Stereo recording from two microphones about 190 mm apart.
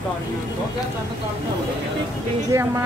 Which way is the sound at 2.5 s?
15° right (ahead or behind).